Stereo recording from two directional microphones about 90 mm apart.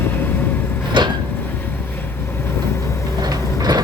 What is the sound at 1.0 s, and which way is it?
Vehicle, 60° right (ahead or behind).